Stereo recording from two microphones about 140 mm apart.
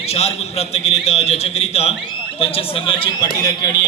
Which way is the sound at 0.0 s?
45° left (ahead or behind).